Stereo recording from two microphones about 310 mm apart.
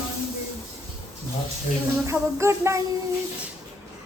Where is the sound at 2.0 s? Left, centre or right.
Centre.